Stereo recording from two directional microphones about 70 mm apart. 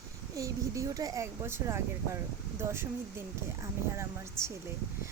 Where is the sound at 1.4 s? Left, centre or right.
Right.